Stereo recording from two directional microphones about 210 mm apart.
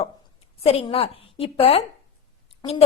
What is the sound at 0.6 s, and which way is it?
A woman's voice, 30° left (ahead or behind).